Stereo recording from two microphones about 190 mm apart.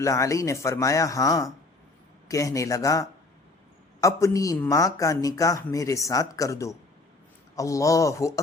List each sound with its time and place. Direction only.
0.0 s a man's voice: 15° left (ahead or behind)